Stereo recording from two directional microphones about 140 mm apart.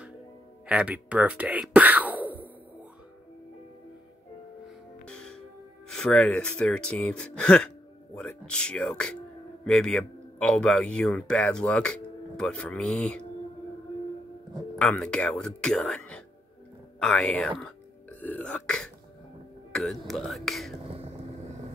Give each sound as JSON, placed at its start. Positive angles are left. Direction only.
{"t": 0.7, "sound": "speech", "side_deg": -10}
{"t": 5.0, "sound": "music", "side_deg": 5}
{"t": 5.9, "sound": "speech", "side_deg": 5}
{"t": 14.8, "sound": "speech", "side_deg": 5}
{"t": 20.8, "sound": "vehicle", "side_deg": -45}